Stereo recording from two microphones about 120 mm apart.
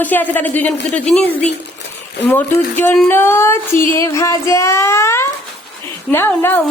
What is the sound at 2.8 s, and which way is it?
Female singing, 15° left (ahead or behind).